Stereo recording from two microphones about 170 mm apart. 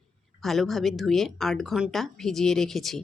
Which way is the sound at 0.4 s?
Centre (ahead or behind).